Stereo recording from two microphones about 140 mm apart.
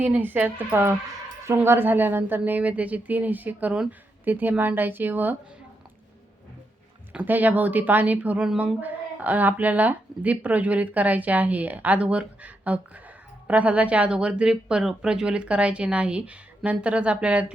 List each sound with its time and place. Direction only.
0.0 s speech: 15° right (ahead or behind)
7.1 s speech: 10° right (ahead or behind)